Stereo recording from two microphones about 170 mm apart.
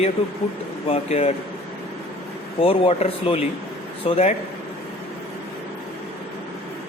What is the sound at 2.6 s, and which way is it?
Speech, 35° left (ahead or behind).